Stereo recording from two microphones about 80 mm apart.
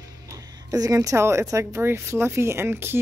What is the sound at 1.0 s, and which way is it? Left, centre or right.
Speech, right.